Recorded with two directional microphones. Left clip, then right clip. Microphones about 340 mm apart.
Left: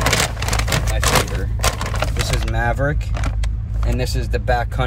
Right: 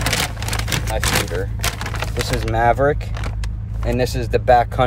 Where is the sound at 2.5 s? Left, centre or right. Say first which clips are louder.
Right 7 dB; right.